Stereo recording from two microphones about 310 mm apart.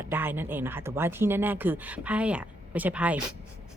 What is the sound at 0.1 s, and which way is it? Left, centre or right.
Speech, centre.